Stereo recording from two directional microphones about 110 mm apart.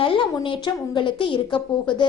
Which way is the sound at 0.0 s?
50° left (ahead or behind).